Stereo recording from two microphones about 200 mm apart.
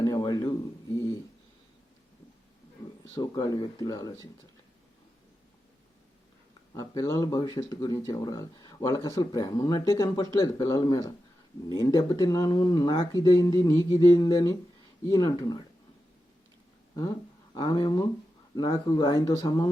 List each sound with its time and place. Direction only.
0.0 s a sound: 20° left (ahead or behind)
3.2 s speech: 20° left (ahead or behind)
6.7 s speech: 15° left (ahead or behind)
16.9 s speech: 15° left (ahead or behind)